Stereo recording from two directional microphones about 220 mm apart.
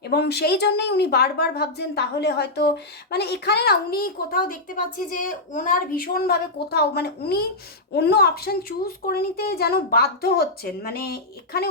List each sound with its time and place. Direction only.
0.0 s a woman's voice: 45° left (ahead or behind)